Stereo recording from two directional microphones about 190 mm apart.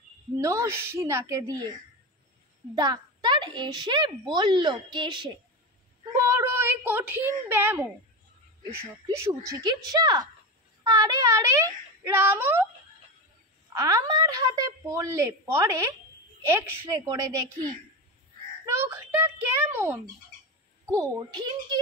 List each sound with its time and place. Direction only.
0.4 s a woman's voice: 15° right (ahead or behind)
2.7 s a child's voice: 20° right (ahead or behind)
13.7 s a woman's voice: 20° right (ahead or behind)
18.7 s a woman's voice: 15° right (ahead or behind)